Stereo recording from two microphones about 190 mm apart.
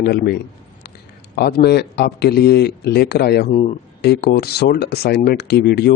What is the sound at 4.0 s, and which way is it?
Speech, 55° left (ahead or behind).